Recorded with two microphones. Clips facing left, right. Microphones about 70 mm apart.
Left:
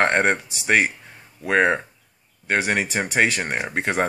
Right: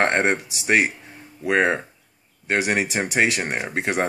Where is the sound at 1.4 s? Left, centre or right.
Left.